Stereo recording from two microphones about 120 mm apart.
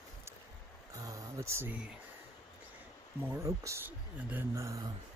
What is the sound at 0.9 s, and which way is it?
Speech, 30° right (ahead or behind).